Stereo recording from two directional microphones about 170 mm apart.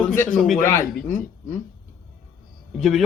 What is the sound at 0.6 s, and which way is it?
Speech, 15° left (ahead or behind).